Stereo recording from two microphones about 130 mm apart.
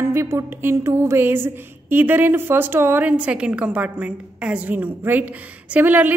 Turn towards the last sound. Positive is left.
turn(degrees=-15)  # may be behind; listen again after turning